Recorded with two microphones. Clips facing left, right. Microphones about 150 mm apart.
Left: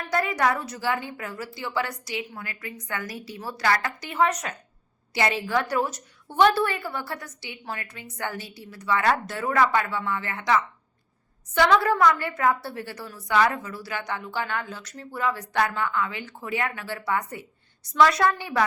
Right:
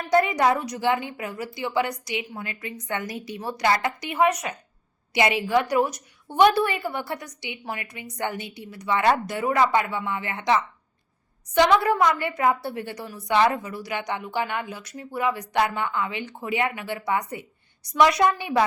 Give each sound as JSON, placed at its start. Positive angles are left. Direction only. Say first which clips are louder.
{"t": 0.1, "sound": "a woman's voice", "louder": "right 4 dB", "side_deg": -20}